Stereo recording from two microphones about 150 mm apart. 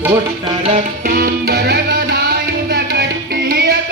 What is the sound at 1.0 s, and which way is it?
Music, 90° right.